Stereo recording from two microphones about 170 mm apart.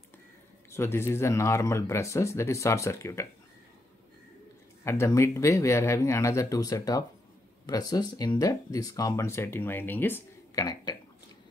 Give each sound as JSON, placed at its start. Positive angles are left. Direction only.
{"t": 0.7, "sound": "speech", "side_deg": 15}
{"t": 4.8, "sound": "speech", "side_deg": 15}